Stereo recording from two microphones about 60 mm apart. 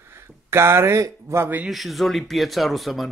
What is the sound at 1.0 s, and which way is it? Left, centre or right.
Speech, right.